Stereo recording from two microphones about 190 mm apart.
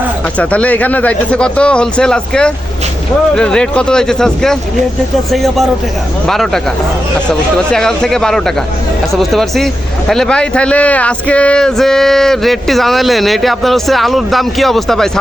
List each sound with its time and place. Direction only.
0.3 s speech: 5° left (ahead or behind)